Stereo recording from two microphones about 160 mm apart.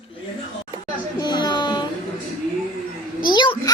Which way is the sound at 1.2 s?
25° left (ahead or behind).